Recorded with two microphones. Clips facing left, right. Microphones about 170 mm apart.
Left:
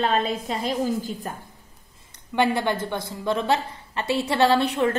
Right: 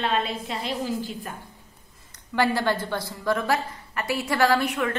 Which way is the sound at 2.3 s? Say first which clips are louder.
Left 1 dB; 20° left (ahead or behind).